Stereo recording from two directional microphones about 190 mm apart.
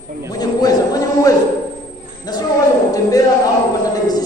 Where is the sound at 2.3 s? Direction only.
20° left (ahead or behind).